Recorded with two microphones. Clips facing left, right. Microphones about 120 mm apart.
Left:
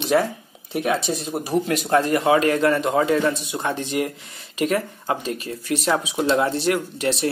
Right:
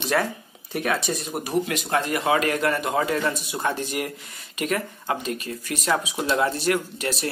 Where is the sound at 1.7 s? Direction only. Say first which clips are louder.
Left 5 dB; 40° left (ahead or behind).